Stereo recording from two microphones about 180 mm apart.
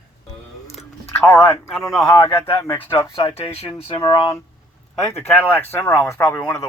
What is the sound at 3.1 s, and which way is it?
Speech, 30° left (ahead or behind).